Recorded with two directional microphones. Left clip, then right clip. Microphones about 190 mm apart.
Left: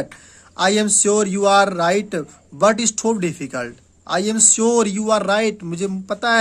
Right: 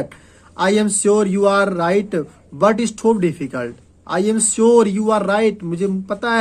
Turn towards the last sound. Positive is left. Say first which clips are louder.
# even
turn(degrees=20)  # may be behind; listen again after turning